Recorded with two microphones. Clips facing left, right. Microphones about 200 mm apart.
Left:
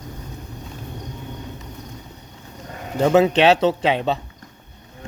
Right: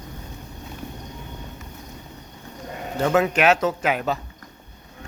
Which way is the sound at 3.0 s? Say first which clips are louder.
Left 4 dB; 25° left (ahead or behind).